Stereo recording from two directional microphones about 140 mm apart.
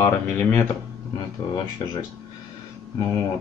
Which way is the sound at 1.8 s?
35° left (ahead or behind).